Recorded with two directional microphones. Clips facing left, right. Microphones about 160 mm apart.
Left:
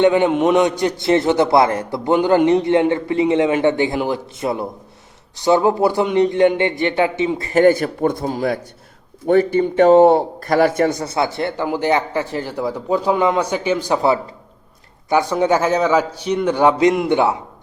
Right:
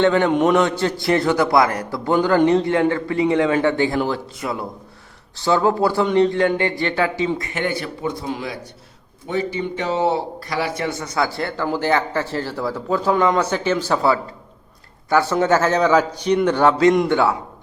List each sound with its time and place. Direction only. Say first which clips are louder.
0.0 s a man's voice: left 2 dB; 15° left (ahead or behind)
7.3 s a man's voice: left 11 dB; 35° left (ahead or behind); by 17.3 s 20° left (ahead or behind)